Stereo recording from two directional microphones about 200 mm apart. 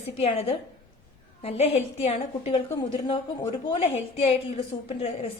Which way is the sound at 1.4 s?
30° left (ahead or behind).